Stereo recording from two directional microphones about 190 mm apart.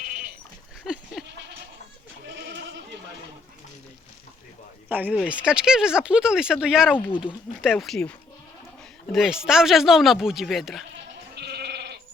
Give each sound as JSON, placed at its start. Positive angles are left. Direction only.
{"t": 0.0, "sound": "goat", "side_deg": -50}
{"t": 1.2, "sound": "goat", "side_deg": 0}
{"t": 4.9, "sound": "speech", "side_deg": -10}
{"t": 9.1, "sound": "speech", "side_deg": 0}
{"t": 11.3, "sound": "goat", "side_deg": -60}